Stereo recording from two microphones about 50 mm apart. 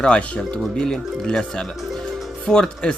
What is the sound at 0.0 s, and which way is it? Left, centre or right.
A man's voice, left.